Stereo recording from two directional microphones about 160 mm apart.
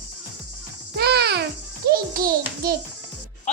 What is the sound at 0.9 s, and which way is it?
Music, 90° right.